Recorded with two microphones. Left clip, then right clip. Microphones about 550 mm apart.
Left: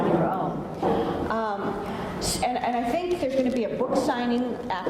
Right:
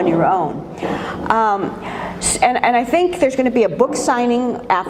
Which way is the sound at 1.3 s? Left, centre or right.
Right.